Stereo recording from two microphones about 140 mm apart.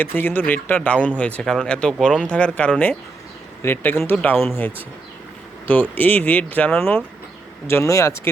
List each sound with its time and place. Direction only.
0.0 s speech: 15° left (ahead or behind)
5.9 s speech: 10° left (ahead or behind)